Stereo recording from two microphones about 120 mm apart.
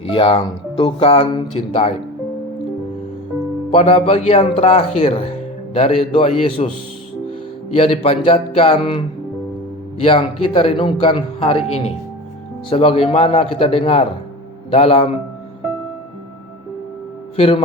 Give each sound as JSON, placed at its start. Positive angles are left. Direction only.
{"t": 0.0, "sound": "speech", "side_deg": 45}
{"t": 3.7, "sound": "speech", "side_deg": 55}
{"t": 7.8, "sound": "speech", "side_deg": 55}
{"t": 12.7, "sound": "speech", "side_deg": 55}
{"t": 17.3, "sound": "speech", "side_deg": 50}